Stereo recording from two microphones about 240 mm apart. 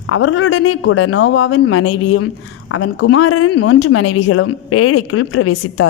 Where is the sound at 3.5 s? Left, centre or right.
Left.